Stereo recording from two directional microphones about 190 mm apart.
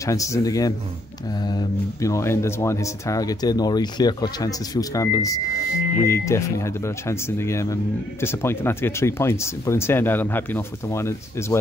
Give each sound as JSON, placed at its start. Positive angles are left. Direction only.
{"t": 0.0, "sound": "speech", "side_deg": 15}